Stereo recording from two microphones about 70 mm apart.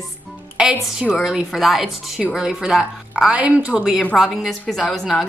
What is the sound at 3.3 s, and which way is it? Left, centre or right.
Speech, right.